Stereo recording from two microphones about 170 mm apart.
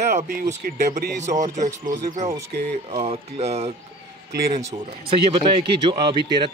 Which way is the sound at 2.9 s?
35° right (ahead or behind).